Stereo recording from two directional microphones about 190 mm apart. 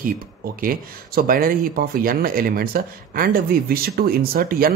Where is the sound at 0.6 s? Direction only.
50° right (ahead or behind).